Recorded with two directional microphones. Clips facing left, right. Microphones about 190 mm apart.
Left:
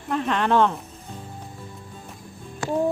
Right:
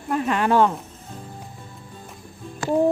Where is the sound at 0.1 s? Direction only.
5° right (ahead or behind).